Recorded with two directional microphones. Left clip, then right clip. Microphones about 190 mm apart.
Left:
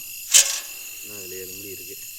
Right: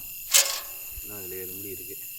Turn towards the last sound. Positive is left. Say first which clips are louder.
# left 5 dB
turn(degrees=-20)  # may be behind; listen again after turning